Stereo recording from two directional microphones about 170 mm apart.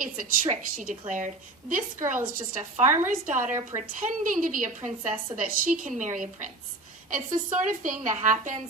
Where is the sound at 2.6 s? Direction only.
45° right (ahead or behind).